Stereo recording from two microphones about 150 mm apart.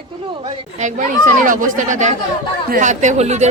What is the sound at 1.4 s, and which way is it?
A woman's voice, 60° right (ahead or behind).